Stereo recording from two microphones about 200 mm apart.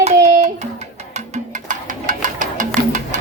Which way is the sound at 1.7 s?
40° right (ahead or behind).